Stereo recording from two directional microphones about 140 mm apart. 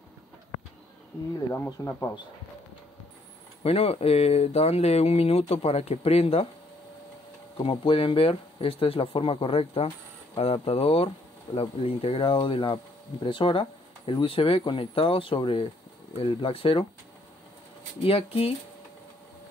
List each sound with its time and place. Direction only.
1.5 s speech: 20° left (ahead or behind)
3.6 s speech: 45° left (ahead or behind)
7.5 s speech: 40° left (ahead or behind)
18.0 s speech: 45° left (ahead or behind)